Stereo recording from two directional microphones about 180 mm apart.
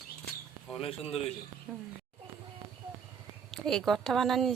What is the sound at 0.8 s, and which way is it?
Speech, 35° left (ahead or behind).